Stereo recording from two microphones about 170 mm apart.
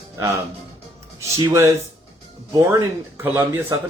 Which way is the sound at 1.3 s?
20° right (ahead or behind).